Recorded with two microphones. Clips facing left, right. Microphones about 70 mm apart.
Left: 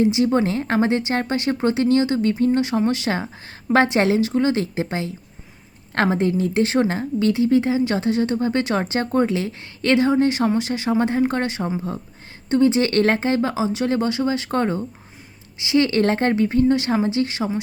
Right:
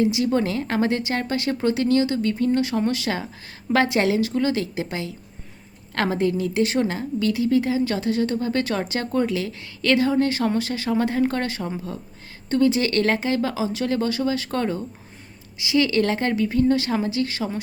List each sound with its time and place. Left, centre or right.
0.0 s a woman's voice: left